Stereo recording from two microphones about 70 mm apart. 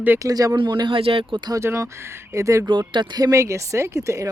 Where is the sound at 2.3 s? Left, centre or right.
Right.